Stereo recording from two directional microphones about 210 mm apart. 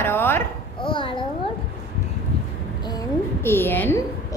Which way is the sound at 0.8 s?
25° left (ahead or behind).